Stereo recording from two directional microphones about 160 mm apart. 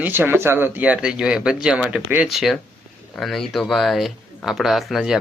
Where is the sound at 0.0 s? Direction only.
15° right (ahead or behind).